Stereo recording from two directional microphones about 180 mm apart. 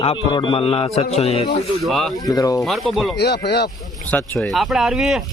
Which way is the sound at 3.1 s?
65° left (ahead or behind).